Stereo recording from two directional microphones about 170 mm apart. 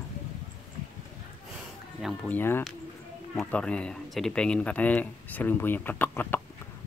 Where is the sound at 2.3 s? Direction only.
15° left (ahead or behind).